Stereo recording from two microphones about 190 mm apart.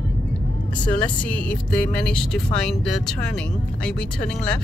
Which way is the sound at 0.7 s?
5° left (ahead or behind).